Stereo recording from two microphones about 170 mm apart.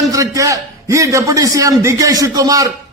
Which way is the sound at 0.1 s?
20° right (ahead or behind).